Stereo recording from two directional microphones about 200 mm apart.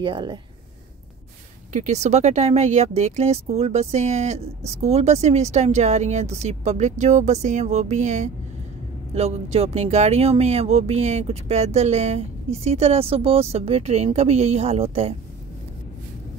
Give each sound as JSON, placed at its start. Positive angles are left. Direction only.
{"t": 0.0, "sound": "speech", "side_deg": -25}
{"t": 1.7, "sound": "speech", "side_deg": -35}